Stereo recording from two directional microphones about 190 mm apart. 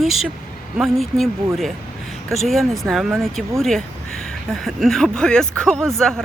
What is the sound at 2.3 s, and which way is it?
Speech, centre (ahead or behind).